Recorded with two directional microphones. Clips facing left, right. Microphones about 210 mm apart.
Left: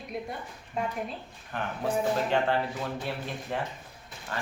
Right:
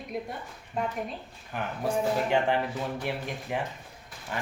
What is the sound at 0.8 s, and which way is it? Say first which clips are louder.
Speech: right 1 dB; centre (ahead or behind).